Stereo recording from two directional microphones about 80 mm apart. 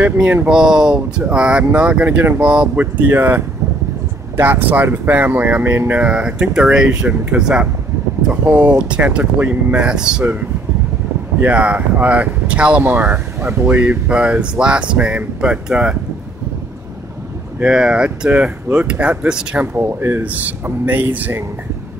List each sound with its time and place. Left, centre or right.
0.0 s speech: centre
0.5 s speech: centre; by 5.9 s right
5.9 s speech: centre
11.4 s speech: centre
17.6 s speech: centre
19.6 s speech: right